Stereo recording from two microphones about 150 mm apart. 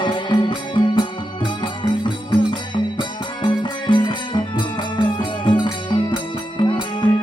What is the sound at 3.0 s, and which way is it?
Music, 35° left (ahead or behind).